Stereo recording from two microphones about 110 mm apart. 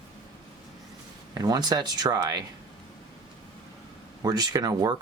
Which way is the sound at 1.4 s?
40° right (ahead or behind).